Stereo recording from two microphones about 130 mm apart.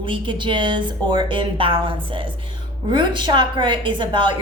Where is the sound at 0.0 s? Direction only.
40° right (ahead or behind).